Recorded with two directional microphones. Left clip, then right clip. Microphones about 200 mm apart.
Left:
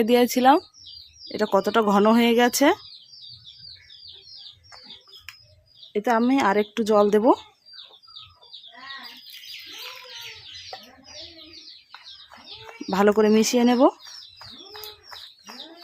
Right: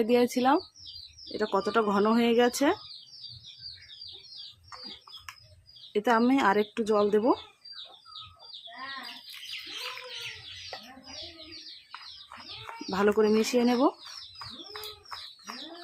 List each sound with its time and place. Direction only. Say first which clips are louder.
0.0 s speech: left 6 dB; 40° left (ahead or behind)
5.9 s speech: left 3 dB; 25° left (ahead or behind); by 7.3 s 40° left (ahead or behind)
12.9 s speech: left 6 dB; 40° left (ahead or behind)
14.0 s bird: left 1 dB; centre (ahead or behind)